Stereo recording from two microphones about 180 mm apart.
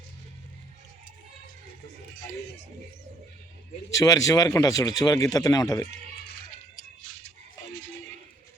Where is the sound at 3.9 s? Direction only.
20° left (ahead or behind).